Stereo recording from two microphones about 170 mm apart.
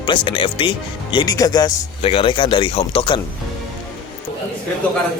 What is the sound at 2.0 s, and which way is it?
Speech, 35° left (ahead or behind).